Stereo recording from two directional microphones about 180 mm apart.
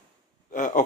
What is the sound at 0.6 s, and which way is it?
Speech, 45° left (ahead or behind).